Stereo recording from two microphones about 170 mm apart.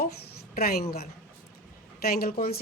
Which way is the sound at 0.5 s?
60° left (ahead or behind).